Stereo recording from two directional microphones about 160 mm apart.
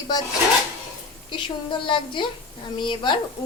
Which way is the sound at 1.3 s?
30° left (ahead or behind).